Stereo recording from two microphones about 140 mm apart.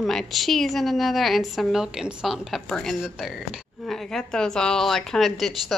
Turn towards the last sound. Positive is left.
turn(degrees=0)  # may be behind; listen again after turning